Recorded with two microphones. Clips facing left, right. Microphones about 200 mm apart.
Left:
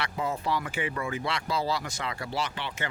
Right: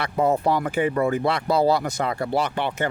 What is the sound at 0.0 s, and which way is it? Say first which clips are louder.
Speech: right 10 dB; 60° right (ahead or behind).